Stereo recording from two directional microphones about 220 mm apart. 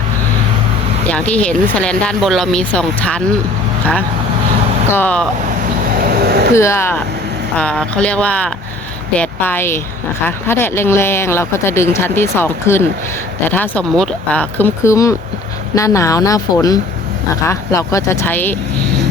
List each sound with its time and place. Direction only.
1.0 s speech: 5° left (ahead or behind)
4.9 s speech: 10° left (ahead or behind)
6.1 s a sound: 45° right (ahead or behind)
6.5 s speech: 10° left (ahead or behind)